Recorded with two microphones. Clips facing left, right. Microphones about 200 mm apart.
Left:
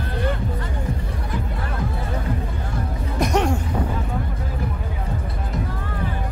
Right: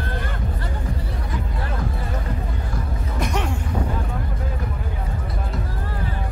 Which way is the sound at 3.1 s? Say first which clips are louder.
Left 6 dB; 40° left (ahead or behind).